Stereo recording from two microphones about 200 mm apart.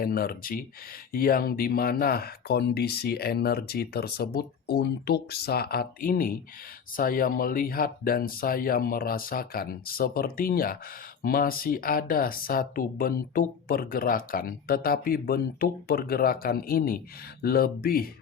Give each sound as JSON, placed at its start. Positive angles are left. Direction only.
{"t": 0.0, "sound": "speech", "side_deg": 45}